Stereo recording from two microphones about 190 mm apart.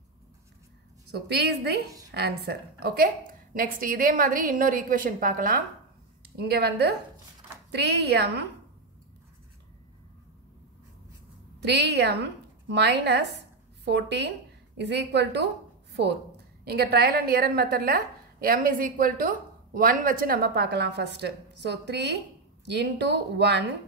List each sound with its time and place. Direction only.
1.1 s a woman's voice: 60° right (ahead or behind)
6.3 s a woman's voice: 60° right (ahead or behind)
11.6 s a woman's voice: 60° right (ahead or behind)
16.6 s a woman's voice: 55° right (ahead or behind)